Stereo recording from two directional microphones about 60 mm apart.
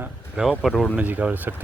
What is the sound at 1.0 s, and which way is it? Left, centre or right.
Speech, right.